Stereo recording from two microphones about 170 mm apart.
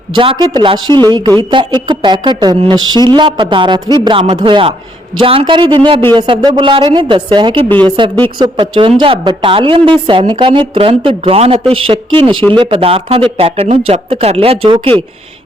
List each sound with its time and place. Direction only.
0.1 s a woman's voice: 30° right (ahead or behind)